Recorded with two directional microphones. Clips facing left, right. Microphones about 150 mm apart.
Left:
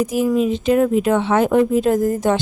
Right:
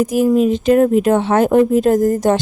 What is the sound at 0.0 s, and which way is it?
A woman's voice, 45° right (ahead or behind).